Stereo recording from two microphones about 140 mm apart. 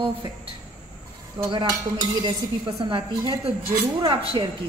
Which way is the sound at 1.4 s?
25° right (ahead or behind).